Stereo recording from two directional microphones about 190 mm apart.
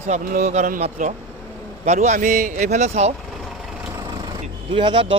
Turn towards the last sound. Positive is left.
turn(degrees=-30)  # may be behind; listen again after turning